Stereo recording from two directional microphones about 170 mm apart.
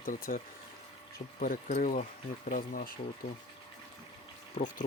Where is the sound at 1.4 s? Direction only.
55° left (ahead or behind).